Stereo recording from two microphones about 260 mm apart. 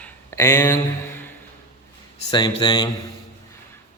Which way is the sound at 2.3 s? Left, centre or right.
Centre.